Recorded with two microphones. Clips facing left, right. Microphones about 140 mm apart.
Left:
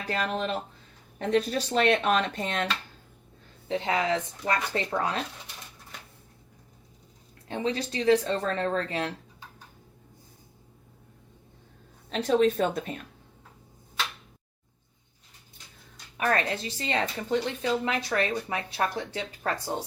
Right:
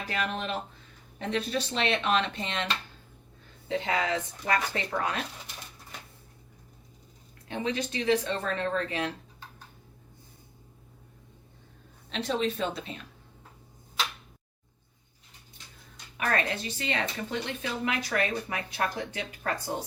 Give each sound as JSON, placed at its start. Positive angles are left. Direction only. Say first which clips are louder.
{"t": 0.1, "sound": "speech", "louder": "left 3 dB", "side_deg": 35}
{"t": 3.7, "sound": "speech", "louder": "left 2 dB", "side_deg": 25}
{"t": 7.4, "sound": "speech", "louder": "left 2 dB", "side_deg": 30}
{"t": 12.1, "sound": "speech", "louder": "left 7 dB", "side_deg": 45}
{"t": 16.1, "sound": "speech", "louder": "left 3 dB", "side_deg": 35}